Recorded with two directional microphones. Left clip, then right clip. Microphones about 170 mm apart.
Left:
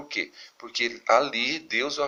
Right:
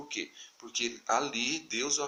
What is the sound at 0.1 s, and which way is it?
Speech, 40° right (ahead or behind).